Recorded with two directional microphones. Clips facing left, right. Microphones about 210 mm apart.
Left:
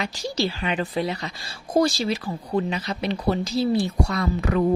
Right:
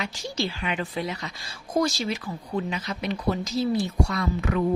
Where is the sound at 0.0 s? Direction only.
35° left (ahead or behind).